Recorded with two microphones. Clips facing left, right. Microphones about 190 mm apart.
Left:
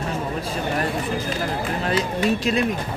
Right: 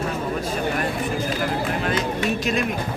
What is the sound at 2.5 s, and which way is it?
Speech, 30° left (ahead or behind).